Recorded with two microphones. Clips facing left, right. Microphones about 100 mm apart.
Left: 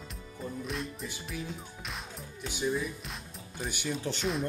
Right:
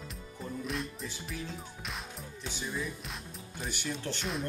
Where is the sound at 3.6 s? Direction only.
15° left (ahead or behind).